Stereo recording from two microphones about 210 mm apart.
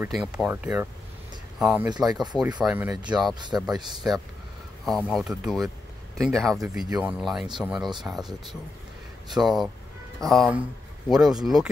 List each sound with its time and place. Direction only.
0.0 s speech: 5° right (ahead or behind)
1.9 s speech: 20° right (ahead or behind)
2.1 s speech: centre (ahead or behind)
3.3 s speech: 20° right (ahead or behind)
3.6 s speech: centre (ahead or behind)